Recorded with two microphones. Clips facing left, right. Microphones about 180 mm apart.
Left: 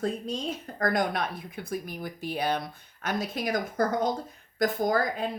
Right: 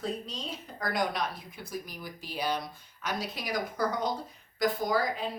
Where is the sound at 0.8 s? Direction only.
50° left (ahead or behind).